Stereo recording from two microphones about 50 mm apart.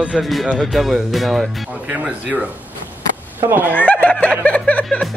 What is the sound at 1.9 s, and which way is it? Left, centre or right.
Speech, right.